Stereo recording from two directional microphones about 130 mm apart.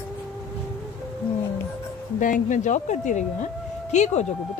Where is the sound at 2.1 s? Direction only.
85° left.